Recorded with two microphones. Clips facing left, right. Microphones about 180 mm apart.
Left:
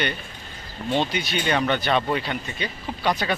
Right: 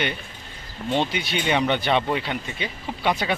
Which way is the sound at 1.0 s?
15° right (ahead or behind).